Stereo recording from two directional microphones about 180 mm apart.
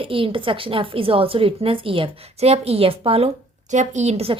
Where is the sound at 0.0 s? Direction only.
30° right (ahead or behind).